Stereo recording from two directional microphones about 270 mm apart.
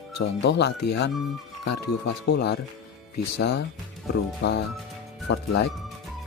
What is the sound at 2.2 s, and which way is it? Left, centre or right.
Speech, left.